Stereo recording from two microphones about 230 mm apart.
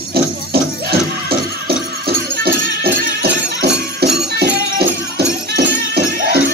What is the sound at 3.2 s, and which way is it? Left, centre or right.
Music, right.